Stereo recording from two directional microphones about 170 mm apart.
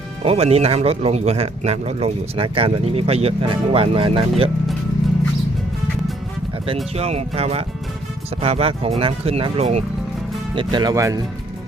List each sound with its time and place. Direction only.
0.2 s a man's voice: 35° right (ahead or behind)
6.9 s a man's voice: 40° right (ahead or behind); by 11.2 s 20° right (ahead or behind)